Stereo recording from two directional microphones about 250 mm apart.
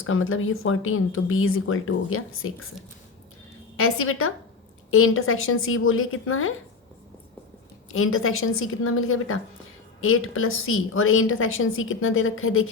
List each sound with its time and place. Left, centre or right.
0.0 s speech: left
3.8 s speech: left
7.9 s speech: left